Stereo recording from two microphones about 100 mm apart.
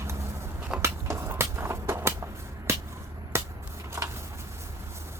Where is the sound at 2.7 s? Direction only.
25° right (ahead or behind).